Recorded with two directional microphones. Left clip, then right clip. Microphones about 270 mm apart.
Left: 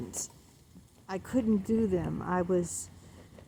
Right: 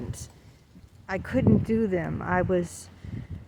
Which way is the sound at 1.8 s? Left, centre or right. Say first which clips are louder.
Right 3 dB; right.